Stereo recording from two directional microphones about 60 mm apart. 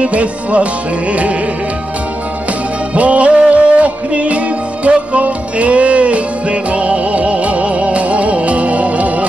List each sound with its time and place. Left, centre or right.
0.0 s music: right
2.9 s music: right